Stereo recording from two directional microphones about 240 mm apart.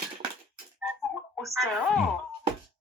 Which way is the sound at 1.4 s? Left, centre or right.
Centre.